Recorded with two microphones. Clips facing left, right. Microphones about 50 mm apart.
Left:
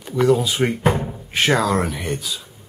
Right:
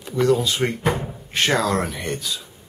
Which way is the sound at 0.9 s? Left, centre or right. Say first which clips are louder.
Left 2 dB; centre.